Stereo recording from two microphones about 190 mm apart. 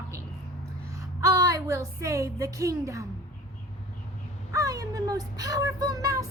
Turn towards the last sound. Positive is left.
turn(degrees=-20)  # may be behind; listen again after turning